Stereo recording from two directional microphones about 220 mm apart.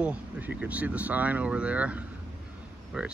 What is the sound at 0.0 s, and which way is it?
Speech, 5° right (ahead or behind).